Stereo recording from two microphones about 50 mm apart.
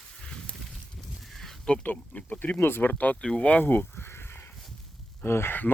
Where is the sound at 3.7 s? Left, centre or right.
Left.